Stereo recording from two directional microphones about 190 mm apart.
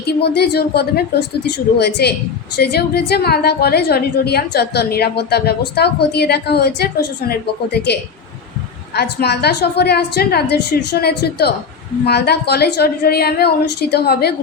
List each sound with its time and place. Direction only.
0.0 s a woman's voice: 60° left (ahead or behind)
9.0 s a woman's voice: 60° left (ahead or behind)